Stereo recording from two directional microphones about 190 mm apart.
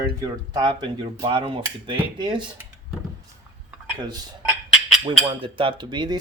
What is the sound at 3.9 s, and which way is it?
Speech, 20° right (ahead or behind).